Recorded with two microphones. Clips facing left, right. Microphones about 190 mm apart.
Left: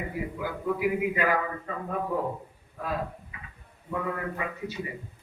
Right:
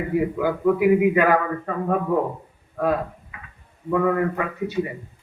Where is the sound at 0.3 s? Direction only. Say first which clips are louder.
Right 8 dB; 65° right (ahead or behind).